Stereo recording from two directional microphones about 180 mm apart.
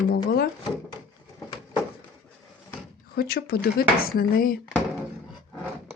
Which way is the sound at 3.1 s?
60° left (ahead or behind).